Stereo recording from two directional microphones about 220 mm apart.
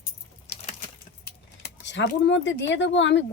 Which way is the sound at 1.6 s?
55° left (ahead or behind).